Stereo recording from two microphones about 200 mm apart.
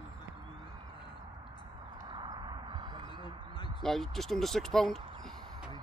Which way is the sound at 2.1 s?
20° right (ahead or behind).